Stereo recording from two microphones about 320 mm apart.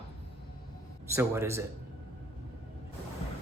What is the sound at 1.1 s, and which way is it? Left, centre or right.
Speech, centre.